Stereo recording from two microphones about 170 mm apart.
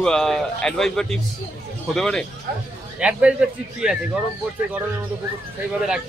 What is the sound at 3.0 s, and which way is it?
Speech, 5° right (ahead or behind).